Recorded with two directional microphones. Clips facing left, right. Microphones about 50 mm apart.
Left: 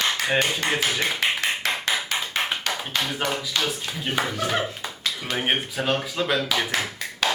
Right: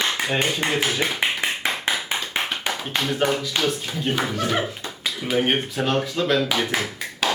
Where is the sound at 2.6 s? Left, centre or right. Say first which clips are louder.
Right 1 dB; centre.